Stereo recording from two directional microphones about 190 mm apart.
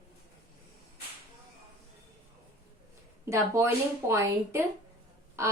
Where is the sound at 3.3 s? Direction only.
15° right (ahead or behind).